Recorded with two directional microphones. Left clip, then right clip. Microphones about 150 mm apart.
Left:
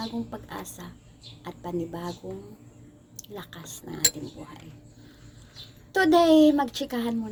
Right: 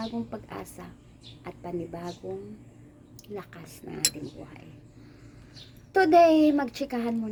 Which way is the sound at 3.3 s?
15° right (ahead or behind).